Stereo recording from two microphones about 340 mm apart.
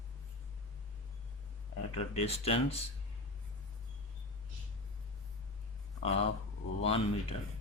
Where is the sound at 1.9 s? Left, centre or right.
Centre.